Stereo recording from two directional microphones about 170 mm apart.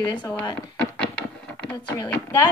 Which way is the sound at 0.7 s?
5° left (ahead or behind).